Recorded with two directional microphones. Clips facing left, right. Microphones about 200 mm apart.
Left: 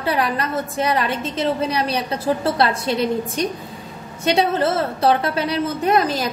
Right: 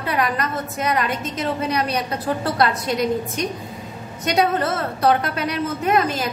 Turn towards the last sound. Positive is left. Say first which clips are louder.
# left 2 dB
turn(degrees=35)  # may be behind; listen again after turning